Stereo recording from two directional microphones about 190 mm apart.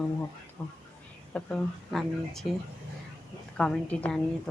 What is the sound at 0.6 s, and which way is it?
Speech, 10° left (ahead or behind).